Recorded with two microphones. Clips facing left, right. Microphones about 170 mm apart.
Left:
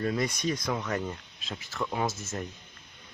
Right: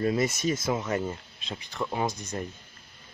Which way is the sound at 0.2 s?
5° right (ahead or behind).